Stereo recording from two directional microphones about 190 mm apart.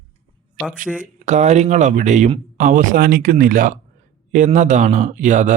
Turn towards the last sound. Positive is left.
turn(degrees=-40)  # may be behind; listen again after turning